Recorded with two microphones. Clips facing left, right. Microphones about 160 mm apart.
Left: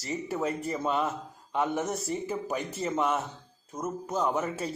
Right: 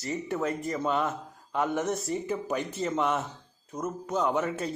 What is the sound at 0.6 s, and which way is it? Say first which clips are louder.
A man's voice: right 1 dB; 5° left (ahead or behind).